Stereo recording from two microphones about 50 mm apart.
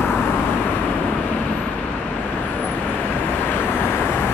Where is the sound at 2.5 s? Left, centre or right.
Left.